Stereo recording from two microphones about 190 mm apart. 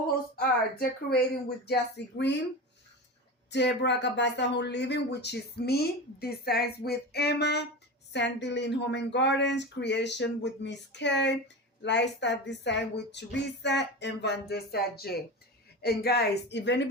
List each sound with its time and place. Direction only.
0.3 s speech: 55° left (ahead or behind)
3.5 s speech: 65° left (ahead or behind)